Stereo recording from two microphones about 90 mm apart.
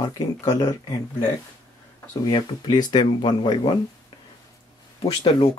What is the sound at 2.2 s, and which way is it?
Speech, 50° left (ahead or behind).